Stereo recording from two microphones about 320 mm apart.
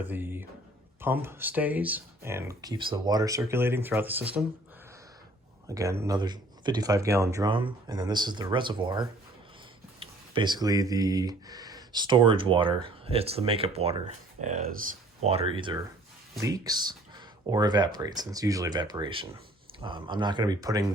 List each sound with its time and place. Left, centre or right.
0.0 s speech: centre
5.6 s speech: centre